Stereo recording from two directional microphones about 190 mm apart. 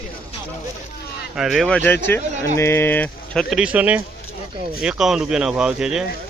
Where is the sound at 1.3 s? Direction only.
Centre (ahead or behind).